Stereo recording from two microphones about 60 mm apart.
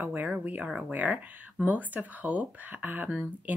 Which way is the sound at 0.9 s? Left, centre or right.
Right.